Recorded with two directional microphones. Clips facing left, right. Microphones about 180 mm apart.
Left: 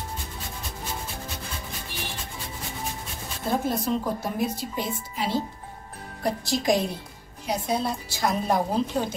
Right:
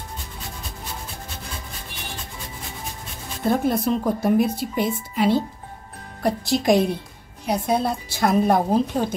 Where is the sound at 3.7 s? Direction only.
60° right (ahead or behind).